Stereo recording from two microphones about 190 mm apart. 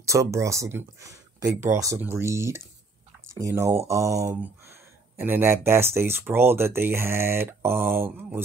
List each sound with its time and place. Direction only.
0.0 s speech: 15° right (ahead or behind)